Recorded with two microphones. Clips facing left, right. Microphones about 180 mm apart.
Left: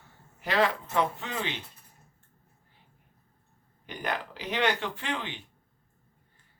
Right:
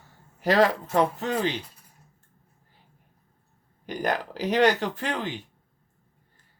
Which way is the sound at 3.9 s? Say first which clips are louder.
Right 6 dB; 40° right (ahead or behind).